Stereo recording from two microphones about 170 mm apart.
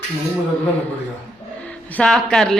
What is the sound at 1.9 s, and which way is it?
Speech, 5° left (ahead or behind).